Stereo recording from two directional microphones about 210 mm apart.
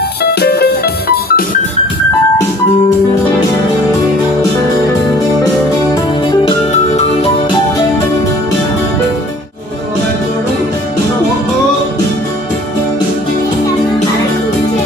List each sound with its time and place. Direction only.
0.2 s music: 50° left (ahead or behind)
6.4 s music: 30° left (ahead or behind)